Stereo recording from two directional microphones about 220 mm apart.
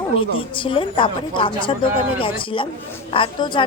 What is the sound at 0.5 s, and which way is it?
A woman's voice, 25° left (ahead or behind).